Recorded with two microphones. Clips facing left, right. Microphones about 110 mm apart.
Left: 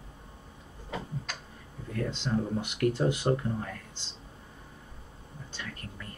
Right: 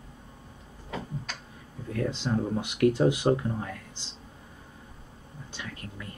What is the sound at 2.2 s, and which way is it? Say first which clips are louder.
Speech: right 2 dB; 15° right (ahead or behind).